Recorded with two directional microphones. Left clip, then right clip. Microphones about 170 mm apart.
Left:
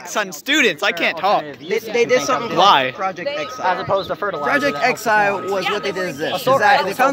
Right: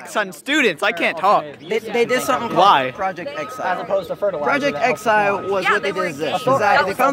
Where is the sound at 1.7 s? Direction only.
65° right (ahead or behind).